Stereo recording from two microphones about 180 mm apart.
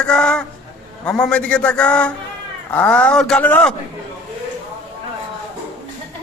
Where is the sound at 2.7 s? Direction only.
10° left (ahead or behind).